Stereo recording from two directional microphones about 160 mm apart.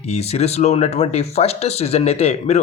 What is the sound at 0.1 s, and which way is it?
Speech, 40° left (ahead or behind).